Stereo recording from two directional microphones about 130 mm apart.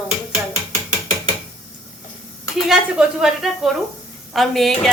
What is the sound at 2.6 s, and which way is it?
Speech, 5° right (ahead or behind).